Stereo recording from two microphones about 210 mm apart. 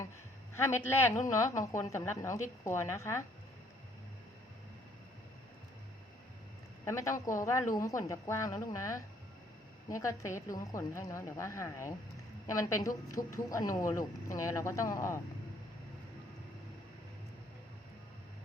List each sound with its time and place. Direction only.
0.5 s a woman's voice: 10° left (ahead or behind)
6.8 s a woman's voice: 15° left (ahead or behind)